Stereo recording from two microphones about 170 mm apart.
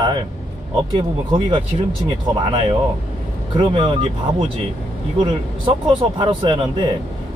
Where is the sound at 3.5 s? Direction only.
30° right (ahead or behind).